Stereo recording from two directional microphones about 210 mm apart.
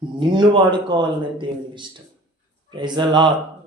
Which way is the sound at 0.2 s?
20° right (ahead or behind).